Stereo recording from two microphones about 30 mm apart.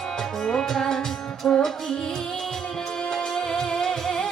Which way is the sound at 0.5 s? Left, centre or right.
Centre.